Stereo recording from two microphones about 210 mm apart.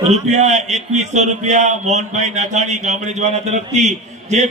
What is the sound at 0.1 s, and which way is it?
A man's voice, 30° right (ahead or behind).